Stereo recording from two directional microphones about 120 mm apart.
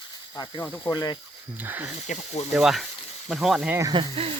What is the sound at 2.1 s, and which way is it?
Speech, 70° left (ahead or behind).